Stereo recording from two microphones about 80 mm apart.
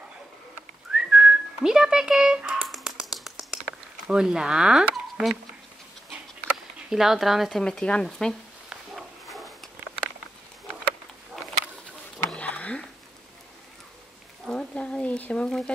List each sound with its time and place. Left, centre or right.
0.9 s whistling: centre
2.7 s finger snapping: centre
4.1 s speech: centre
6.5 s speech: centre
7.6 s speech: centre
8.9 s dog: centre
12.3 s a sound: centre
14.4 s a sound: centre